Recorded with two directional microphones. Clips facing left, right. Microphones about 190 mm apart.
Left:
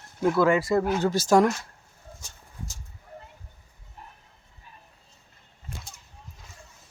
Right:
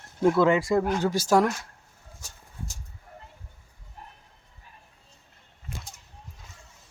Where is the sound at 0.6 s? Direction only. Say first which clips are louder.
Even; 5° left (ahead or behind).